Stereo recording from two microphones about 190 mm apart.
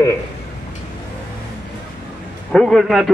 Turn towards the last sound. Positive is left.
turn(degrees=0)  # may be behind; listen again after turning